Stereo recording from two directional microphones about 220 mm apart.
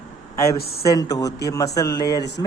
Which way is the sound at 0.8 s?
15° left (ahead or behind).